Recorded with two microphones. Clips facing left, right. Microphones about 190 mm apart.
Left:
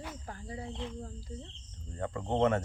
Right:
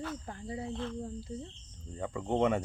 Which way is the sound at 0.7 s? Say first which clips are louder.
Right 3 dB; 15° left (ahead or behind).